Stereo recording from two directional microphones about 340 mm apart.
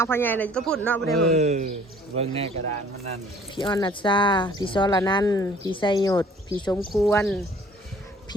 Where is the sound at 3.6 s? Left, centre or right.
Centre.